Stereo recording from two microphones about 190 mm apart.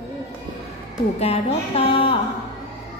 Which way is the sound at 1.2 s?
35° left (ahead or behind).